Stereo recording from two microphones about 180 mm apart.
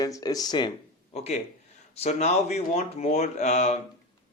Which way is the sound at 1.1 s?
35° left (ahead or behind).